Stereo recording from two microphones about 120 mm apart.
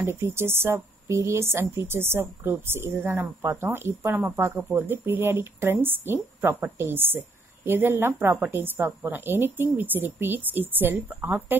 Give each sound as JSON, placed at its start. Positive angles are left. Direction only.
{"t": 0.0, "sound": "a woman's voice", "side_deg": -20}